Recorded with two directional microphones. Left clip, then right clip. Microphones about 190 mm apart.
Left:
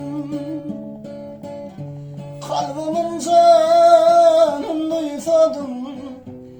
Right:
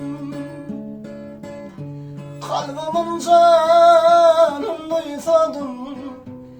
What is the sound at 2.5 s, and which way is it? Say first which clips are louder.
Music: even; 15° right (ahead or behind).